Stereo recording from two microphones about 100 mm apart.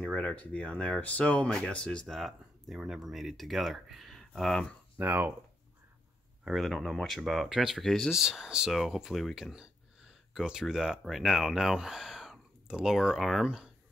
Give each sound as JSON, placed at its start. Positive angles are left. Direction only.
{"t": 0.0, "sound": "speech", "side_deg": 10}
{"t": 4.9, "sound": "speech", "side_deg": -20}
{"t": 6.4, "sound": "speech", "side_deg": 0}